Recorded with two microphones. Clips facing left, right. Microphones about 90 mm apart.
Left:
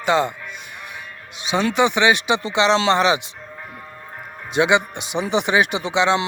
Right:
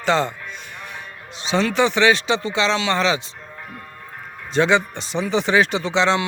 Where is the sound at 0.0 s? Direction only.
10° left (ahead or behind).